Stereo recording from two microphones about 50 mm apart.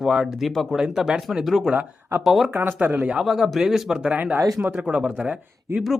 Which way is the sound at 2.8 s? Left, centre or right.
Right.